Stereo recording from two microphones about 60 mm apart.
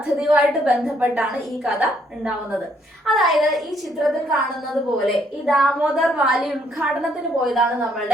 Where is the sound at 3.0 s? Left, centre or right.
Centre.